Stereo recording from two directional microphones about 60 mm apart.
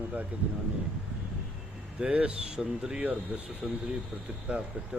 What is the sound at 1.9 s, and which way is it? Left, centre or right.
Speech, centre.